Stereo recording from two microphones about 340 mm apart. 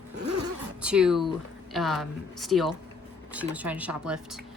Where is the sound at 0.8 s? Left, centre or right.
Centre.